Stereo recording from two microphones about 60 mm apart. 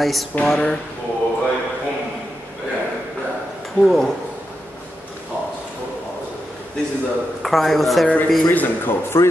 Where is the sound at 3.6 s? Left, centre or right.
Centre.